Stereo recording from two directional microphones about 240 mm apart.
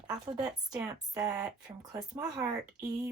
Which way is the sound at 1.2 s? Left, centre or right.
Centre.